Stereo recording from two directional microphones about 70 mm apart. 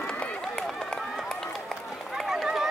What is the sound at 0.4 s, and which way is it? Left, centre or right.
Run, centre.